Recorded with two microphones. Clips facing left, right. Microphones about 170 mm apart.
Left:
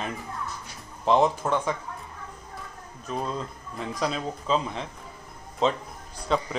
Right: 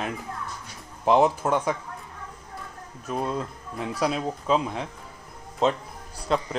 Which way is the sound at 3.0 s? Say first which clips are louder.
Right 2 dB; 10° right (ahead or behind).